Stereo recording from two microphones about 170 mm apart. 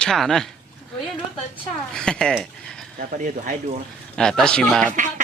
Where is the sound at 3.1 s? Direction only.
45° right (ahead or behind).